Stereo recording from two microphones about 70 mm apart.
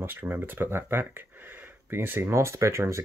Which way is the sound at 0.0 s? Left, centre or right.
Right.